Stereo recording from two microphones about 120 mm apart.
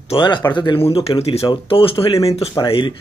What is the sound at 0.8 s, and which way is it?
Speech, 55° left (ahead or behind).